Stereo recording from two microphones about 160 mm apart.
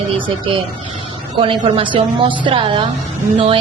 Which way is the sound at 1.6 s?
30° right (ahead or behind).